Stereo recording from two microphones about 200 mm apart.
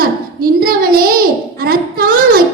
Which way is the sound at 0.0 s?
45° right (ahead or behind).